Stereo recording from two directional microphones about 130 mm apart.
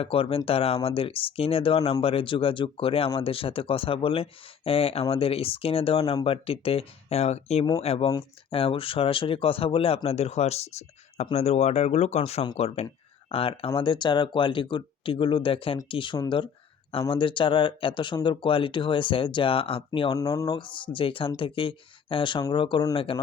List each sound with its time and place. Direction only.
0.0 s speech: 45° left (ahead or behind)
20.1 s speech: 25° left (ahead or behind)
20.5 s speech: 40° left (ahead or behind)